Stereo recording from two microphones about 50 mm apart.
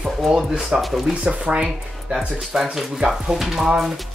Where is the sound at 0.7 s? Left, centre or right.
Centre.